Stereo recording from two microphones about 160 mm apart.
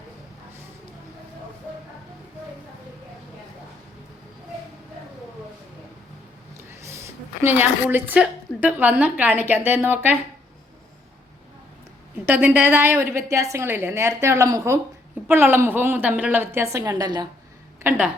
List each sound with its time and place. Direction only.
6.8 s a woman's voice: 15° right (ahead or behind)
12.2 s a woman's voice: 10° right (ahead or behind)
17.8 s a woman's voice: 5° right (ahead or behind)